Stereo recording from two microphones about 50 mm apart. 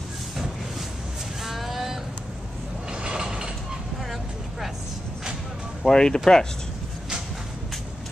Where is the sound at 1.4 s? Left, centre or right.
Centre.